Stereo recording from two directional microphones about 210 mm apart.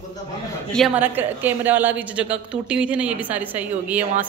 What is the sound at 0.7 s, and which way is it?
A woman's voice, centre (ahead or behind).